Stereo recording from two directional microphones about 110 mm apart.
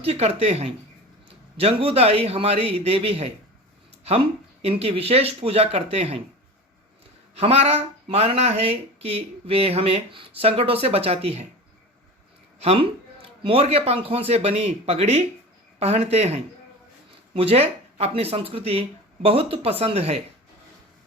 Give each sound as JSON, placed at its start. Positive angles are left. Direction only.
{"t": 0.0, "sound": "speech", "side_deg": -65}
{"t": 4.6, "sound": "speech", "side_deg": -60}
{"t": 7.3, "sound": "speech", "side_deg": -65}
{"t": 12.5, "sound": "speech", "side_deg": -60}
{"t": 17.3, "sound": "speech", "side_deg": -65}